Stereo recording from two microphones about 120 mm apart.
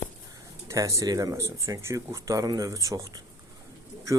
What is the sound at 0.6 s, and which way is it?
Speech, 25° right (ahead or behind).